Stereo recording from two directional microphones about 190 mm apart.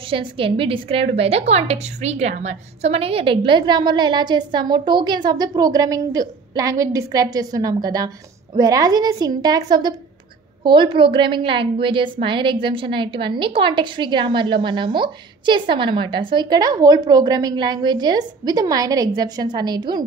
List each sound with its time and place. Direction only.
0.1 s a woman's voice: 30° right (ahead or behind)